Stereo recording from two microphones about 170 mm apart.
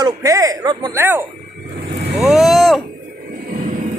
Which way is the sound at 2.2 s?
Centre (ahead or behind).